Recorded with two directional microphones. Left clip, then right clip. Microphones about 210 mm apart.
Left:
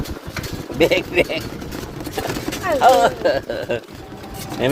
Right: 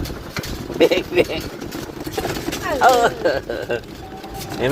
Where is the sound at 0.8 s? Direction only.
15° left (ahead or behind).